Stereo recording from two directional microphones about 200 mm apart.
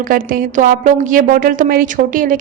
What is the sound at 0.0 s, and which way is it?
A woman's voice, 45° right (ahead or behind).